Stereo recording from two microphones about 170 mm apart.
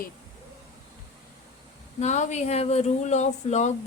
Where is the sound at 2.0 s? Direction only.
45° left (ahead or behind).